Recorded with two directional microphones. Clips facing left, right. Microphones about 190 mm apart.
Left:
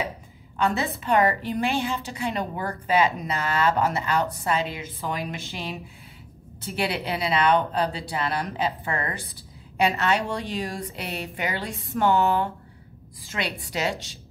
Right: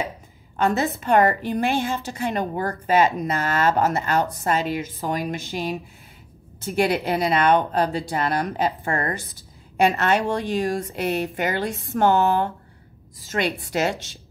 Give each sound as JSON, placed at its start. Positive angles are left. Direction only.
{"t": 0.6, "sound": "a woman's voice", "side_deg": -45}